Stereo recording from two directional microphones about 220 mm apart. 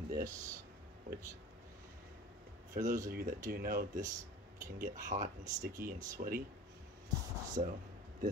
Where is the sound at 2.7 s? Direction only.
35° right (ahead or behind).